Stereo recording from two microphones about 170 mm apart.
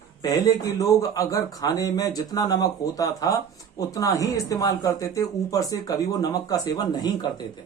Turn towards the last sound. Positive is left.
turn(degrees=25)  # may be behind; listen again after turning